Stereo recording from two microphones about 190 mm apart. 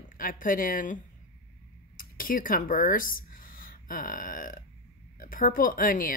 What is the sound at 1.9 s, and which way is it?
Speech, 45° left (ahead or behind).